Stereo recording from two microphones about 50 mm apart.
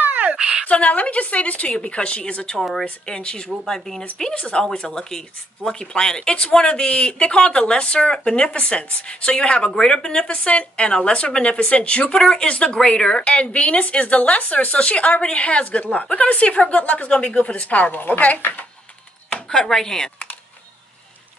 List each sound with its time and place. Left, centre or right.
0.0 s a sound: right
0.7 s speech: left; by 4.0 s centre
4.2 s speech: left
19.5 s speech: centre